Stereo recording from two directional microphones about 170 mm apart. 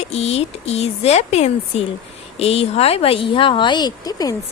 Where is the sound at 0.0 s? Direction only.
40° left (ahead or behind).